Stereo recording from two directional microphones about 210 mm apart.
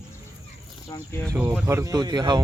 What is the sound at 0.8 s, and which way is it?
Speech, 15° left (ahead or behind).